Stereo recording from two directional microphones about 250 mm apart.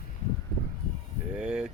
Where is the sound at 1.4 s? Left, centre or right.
Centre.